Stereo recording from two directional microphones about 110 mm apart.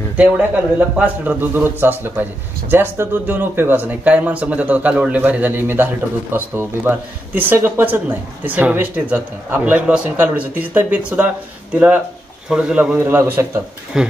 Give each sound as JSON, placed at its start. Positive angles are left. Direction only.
{"t": 0.2, "sound": "speech", "side_deg": -15}
{"t": 13.0, "sound": "a man's voice", "side_deg": -20}
{"t": 13.9, "sound": "speech", "side_deg": -5}